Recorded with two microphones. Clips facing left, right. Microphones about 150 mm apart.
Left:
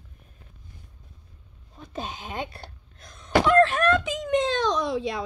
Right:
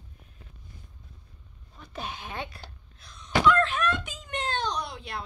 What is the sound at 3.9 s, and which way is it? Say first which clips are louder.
A child's voice: left 12 dB; 90° left.